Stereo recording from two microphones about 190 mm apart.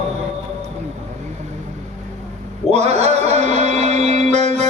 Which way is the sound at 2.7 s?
35° right (ahead or behind).